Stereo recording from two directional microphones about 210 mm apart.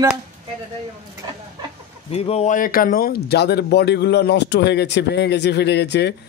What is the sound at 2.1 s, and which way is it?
A man's voice, 30° left (ahead or behind).